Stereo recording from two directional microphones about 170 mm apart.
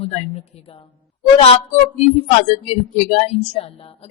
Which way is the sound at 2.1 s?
35° left (ahead or behind).